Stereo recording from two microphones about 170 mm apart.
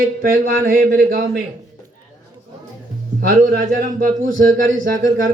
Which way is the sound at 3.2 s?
60° right (ahead or behind).